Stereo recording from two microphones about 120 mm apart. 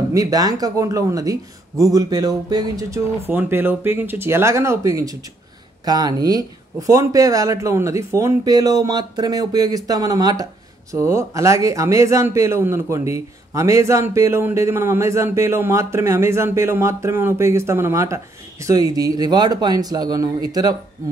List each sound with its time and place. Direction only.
0.1 s speech: 30° right (ahead or behind)
3.3 s speech: 15° right (ahead or behind)